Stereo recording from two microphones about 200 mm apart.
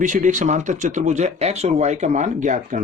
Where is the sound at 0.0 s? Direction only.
40° right (ahead or behind).